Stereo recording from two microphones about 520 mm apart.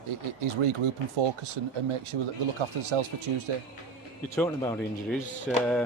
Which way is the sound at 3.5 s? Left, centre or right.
Right.